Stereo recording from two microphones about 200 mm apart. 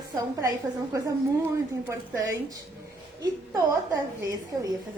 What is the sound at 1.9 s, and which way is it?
Speech, 15° right (ahead or behind).